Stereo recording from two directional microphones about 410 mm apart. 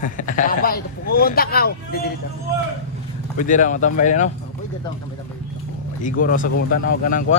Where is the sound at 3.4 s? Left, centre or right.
Centre.